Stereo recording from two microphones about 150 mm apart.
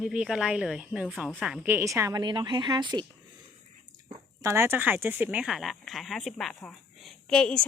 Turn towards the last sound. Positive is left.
turn(degrees=5)  # may be behind; listen again after turning